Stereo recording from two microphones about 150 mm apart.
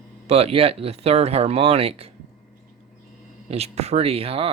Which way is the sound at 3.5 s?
45° right (ahead or behind).